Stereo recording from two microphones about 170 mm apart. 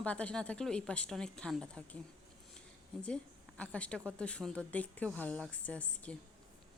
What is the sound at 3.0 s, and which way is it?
A woman's voice, 5° left (ahead or behind).